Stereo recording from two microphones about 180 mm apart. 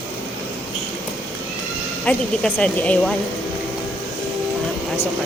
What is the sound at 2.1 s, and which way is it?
Speech, 5° left (ahead or behind).